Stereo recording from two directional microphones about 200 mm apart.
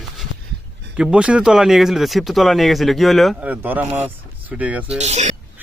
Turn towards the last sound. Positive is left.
turn(degrees=-35)  # may be behind; listen again after turning